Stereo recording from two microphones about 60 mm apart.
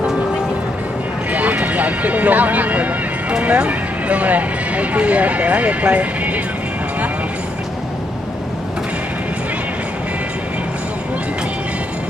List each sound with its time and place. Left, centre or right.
1.3 s speech: right